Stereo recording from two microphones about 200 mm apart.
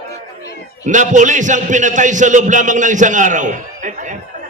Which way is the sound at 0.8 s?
40° right (ahead or behind).